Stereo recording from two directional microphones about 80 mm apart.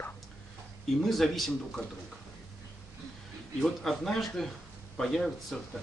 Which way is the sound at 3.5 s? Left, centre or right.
Centre.